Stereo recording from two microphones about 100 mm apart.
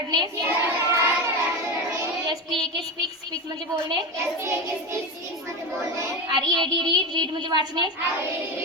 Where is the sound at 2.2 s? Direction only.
45° right (ahead or behind).